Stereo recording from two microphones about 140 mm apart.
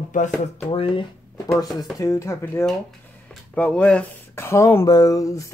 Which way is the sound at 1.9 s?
20° left (ahead or behind).